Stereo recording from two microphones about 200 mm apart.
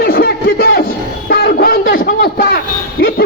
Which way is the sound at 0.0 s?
50° left (ahead or behind).